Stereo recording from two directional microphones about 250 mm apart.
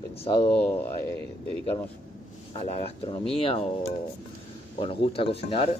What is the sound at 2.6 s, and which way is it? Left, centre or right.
Speech, left.